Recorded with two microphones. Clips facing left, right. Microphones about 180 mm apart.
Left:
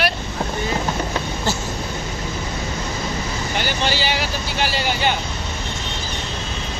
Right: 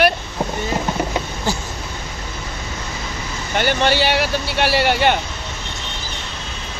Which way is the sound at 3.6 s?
60° right (ahead or behind).